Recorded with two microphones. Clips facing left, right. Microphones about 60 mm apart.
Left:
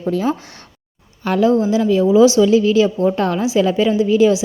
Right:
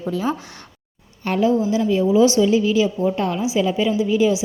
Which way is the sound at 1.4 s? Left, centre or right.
Left.